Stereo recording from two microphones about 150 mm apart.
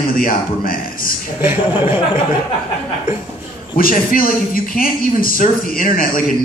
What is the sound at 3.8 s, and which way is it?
A man's voice, 65° left (ahead or behind).